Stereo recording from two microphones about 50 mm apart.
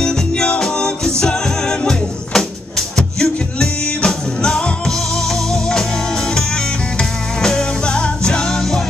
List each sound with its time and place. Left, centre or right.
0.0 s music: centre
4.9 s music: centre